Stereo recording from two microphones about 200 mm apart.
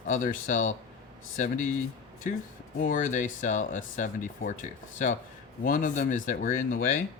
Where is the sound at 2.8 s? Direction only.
40° left (ahead or behind).